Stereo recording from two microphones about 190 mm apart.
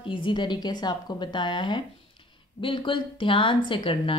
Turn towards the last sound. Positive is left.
turn(degrees=25)  # may be behind; listen again after turning